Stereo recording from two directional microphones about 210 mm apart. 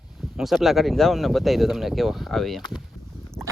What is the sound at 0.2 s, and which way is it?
Speech, centre (ahead or behind).